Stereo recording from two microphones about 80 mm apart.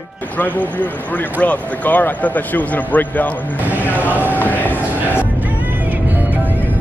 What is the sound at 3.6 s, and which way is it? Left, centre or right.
Speech, right.